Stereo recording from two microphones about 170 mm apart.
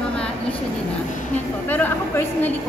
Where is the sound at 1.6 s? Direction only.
10° left (ahead or behind).